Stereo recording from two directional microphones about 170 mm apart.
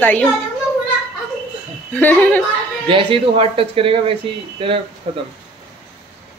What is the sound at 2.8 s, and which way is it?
Speech, 30° right (ahead or behind).